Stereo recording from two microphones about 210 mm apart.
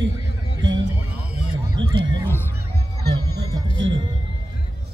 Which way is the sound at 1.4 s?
25° right (ahead or behind).